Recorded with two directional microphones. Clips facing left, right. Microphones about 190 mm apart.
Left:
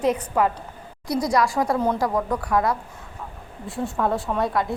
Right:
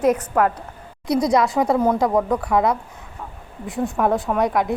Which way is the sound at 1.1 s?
20° right (ahead or behind).